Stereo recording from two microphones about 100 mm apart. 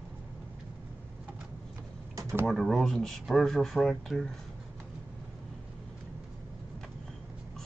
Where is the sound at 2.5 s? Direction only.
Centre (ahead or behind).